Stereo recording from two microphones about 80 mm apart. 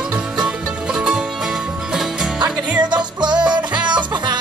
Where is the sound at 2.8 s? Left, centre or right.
Right.